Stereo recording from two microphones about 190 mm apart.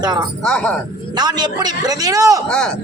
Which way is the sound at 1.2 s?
20° right (ahead or behind).